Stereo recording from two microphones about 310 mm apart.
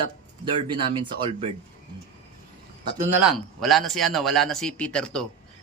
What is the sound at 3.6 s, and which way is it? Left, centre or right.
Speech, centre.